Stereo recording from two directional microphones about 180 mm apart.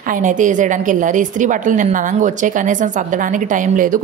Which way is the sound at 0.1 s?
45° right (ahead or behind).